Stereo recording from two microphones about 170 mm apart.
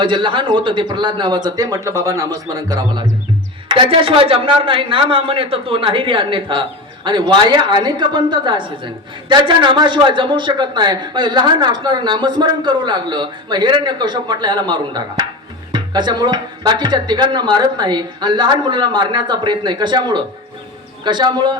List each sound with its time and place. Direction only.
0.0 s a man's voice: 30° right (ahead or behind)